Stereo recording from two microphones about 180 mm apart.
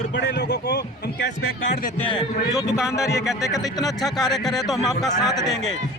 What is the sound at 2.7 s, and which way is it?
Speech, 5° right (ahead or behind).